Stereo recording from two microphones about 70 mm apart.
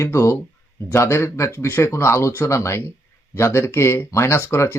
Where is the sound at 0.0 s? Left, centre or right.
Left.